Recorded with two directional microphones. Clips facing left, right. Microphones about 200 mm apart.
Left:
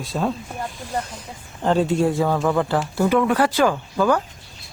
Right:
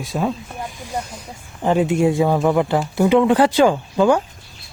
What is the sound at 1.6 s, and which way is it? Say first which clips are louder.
Speech: right 2 dB; 15° right (ahead or behind).